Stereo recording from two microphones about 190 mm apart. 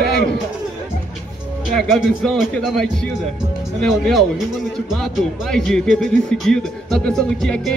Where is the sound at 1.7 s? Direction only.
Centre (ahead or behind).